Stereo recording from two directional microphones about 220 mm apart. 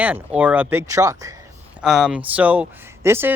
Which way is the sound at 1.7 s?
5° right (ahead or behind).